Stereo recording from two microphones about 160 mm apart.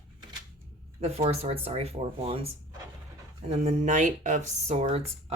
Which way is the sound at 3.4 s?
45° right (ahead or behind).